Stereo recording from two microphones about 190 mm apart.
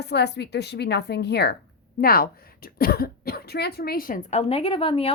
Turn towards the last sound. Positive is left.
turn(degrees=30)  # may be behind; listen again after turning